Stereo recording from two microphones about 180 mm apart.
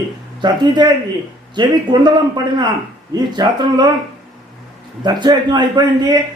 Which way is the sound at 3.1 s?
25° right (ahead or behind).